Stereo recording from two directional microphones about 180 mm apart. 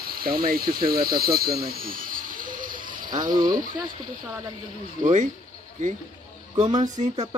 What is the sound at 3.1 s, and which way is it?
Speech, 20° right (ahead or behind).